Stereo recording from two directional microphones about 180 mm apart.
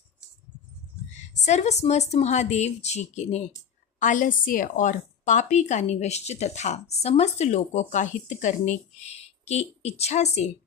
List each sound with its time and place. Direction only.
1.3 s a woman's voice: 40° left (ahead or behind)